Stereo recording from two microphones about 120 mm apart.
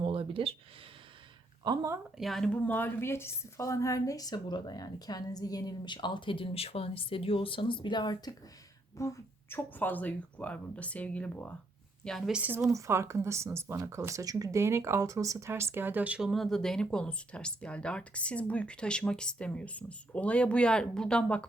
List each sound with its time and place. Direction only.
0.0 s a sound: 50° right (ahead or behind)
1.6 s speech: 35° right (ahead or behind)
2.1 s a woman's voice: centre (ahead or behind); by 8.3 s 40° left (ahead or behind)
9.0 s a woman's voice: 25° left (ahead or behind); by 12.3 s 5° left (ahead or behind)
12.3 s speech: 15° right (ahead or behind)
16.3 s speech: centre (ahead or behind)